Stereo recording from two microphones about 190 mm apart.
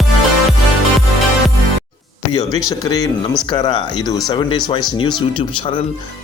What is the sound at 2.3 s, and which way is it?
A man's voice, 20° left (ahead or behind).